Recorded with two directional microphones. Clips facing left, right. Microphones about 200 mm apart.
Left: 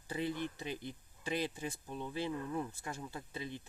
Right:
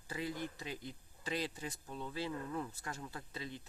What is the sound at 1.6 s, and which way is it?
Speech, 15° left (ahead or behind).